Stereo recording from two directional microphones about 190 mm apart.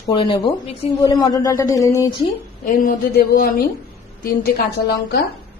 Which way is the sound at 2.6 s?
45° left (ahead or behind).